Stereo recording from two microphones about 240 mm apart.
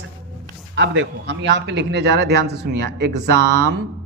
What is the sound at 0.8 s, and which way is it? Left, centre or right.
A woman's voice, right.